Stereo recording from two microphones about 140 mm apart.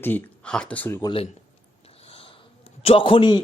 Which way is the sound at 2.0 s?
40° left (ahead or behind).